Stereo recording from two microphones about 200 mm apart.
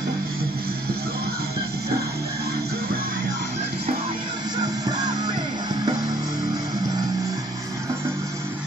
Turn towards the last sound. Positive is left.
turn(degrees=-20)  # may be behind; listen again after turning